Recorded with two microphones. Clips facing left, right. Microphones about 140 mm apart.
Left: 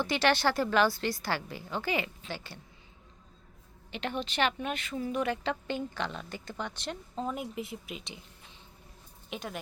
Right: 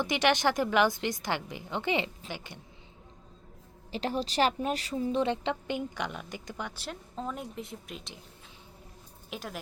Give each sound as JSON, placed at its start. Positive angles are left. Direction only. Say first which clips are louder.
{"t": 0.0, "sound": "a woman's voice", "louder": "right 1 dB", "side_deg": -15}
{"t": 3.9, "sound": "a woman's voice", "louder": "right 3 dB", "side_deg": -35}
{"t": 9.3, "sound": "speech", "louder": "left 1 dB", "side_deg": 0}